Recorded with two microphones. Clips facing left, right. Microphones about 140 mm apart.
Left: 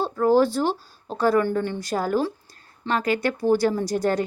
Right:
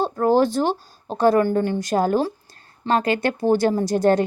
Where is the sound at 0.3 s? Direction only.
20° right (ahead or behind).